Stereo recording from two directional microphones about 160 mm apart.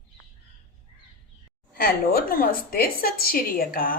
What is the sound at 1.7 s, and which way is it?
A woman's voice, 65° left (ahead or behind).